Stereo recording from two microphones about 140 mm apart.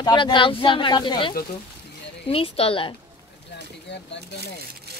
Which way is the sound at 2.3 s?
45° left (ahead or behind).